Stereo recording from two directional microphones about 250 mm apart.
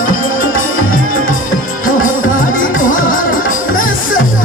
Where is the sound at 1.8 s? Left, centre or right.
Left.